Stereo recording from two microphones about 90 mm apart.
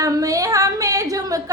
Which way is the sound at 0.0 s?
40° right (ahead or behind).